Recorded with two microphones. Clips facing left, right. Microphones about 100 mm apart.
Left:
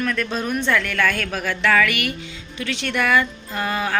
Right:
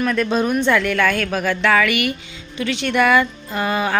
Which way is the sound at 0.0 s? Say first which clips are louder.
Right 5 dB; 15° right (ahead or behind).